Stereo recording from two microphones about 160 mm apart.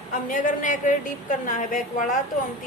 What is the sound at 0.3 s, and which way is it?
A woman's voice, 55° left (ahead or behind).